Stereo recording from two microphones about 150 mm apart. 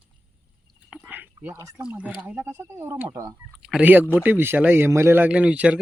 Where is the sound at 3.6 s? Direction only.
5° right (ahead or behind).